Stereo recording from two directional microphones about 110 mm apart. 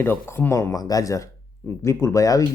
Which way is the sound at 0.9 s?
30° left (ahead or behind).